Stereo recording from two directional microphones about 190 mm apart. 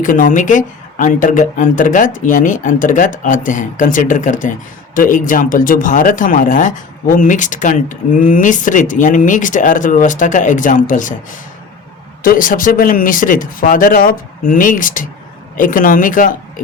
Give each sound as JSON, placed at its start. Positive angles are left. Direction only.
{"t": 0.0, "sound": "a woman's voice", "side_deg": 45}